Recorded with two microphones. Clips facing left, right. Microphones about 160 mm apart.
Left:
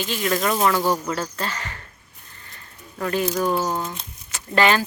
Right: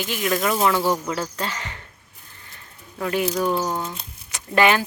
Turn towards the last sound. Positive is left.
turn(degrees=-15)  # may be behind; listen again after turning